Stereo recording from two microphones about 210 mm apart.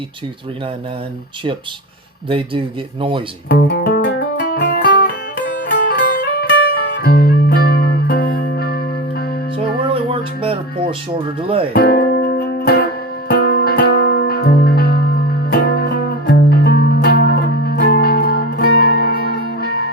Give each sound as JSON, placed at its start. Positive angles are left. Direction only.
{"t": 2.3, "sound": "speech", "side_deg": -25}
{"t": 3.5, "sound": "music", "side_deg": 50}
{"t": 9.8, "sound": "music", "side_deg": -25}
{"t": 11.4, "sound": "speech", "side_deg": -25}
{"t": 11.7, "sound": "music", "side_deg": 45}